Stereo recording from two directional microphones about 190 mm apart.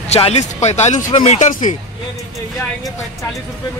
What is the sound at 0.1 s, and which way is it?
Speech, 30° left (ahead or behind).